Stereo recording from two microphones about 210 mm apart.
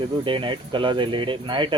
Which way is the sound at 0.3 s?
25° right (ahead or behind).